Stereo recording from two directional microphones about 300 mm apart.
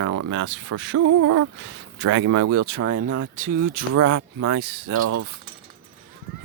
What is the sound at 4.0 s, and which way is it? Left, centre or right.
Speech, right.